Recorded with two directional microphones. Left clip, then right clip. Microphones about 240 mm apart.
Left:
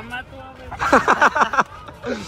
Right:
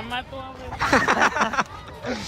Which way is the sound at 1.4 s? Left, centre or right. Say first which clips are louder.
Left 5 dB; centre.